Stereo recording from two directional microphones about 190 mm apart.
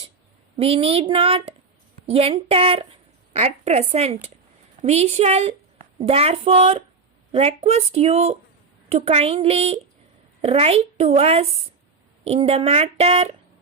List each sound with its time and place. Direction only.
0.5 s a woman's voice: 30° right (ahead or behind)